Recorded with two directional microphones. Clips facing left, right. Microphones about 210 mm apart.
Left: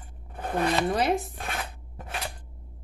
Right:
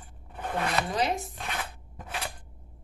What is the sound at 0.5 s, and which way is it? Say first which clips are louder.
Speech: left 4 dB; 35° left (ahead or behind).